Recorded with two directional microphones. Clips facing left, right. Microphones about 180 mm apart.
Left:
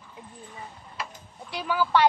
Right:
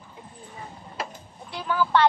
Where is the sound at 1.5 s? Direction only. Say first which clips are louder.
Right 1 dB; 15° left (ahead or behind).